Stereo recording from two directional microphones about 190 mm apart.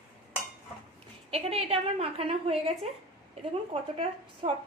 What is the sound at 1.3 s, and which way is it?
A woman's voice, 30° right (ahead or behind).